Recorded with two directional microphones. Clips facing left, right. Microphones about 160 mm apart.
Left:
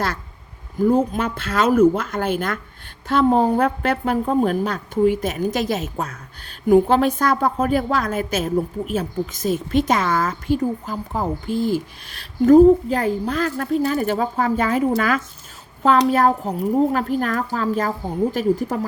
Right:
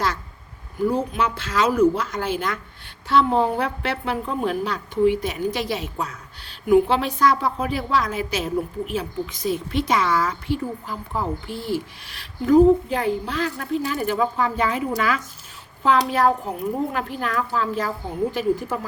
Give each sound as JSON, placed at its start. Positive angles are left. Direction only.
{"t": 0.9, "sound": "a woman's voice", "side_deg": 50}